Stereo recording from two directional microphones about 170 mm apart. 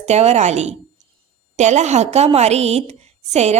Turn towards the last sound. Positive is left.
turn(degrees=-40)  # may be behind; listen again after turning